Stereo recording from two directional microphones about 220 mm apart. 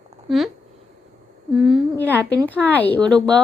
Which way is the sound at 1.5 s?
Centre (ahead or behind).